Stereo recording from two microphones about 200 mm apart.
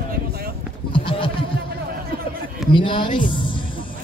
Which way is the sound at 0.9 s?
25° left (ahead or behind).